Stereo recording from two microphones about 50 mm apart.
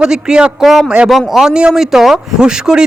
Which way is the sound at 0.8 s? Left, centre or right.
Right.